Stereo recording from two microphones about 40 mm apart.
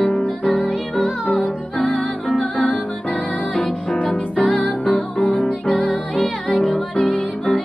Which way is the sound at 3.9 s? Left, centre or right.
Left.